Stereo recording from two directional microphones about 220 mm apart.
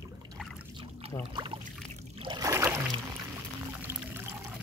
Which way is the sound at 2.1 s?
20° right (ahead or behind).